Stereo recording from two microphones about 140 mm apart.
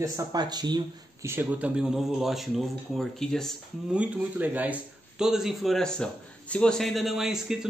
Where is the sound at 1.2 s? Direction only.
15° right (ahead or behind); by 3.5 s 5° left (ahead or behind).